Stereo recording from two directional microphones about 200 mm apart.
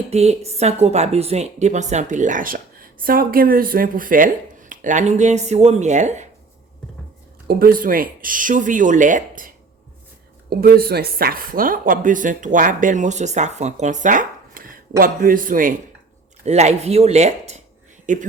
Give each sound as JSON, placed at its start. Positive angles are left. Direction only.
{"t": 0.1, "sound": "speech", "side_deg": -30}
{"t": 7.4, "sound": "speech", "side_deg": -45}
{"t": 10.5, "sound": "speech", "side_deg": -50}